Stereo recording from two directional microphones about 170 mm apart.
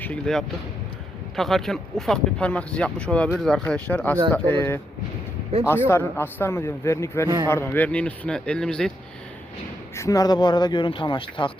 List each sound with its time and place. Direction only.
0.0 s a man's voice: 5° left (ahead or behind)
5.9 s a man's voice: 15° left (ahead or behind)
9.9 s speech: 20° left (ahead or behind)